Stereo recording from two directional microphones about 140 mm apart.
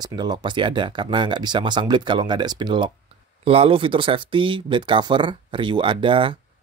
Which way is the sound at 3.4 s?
45° right (ahead or behind).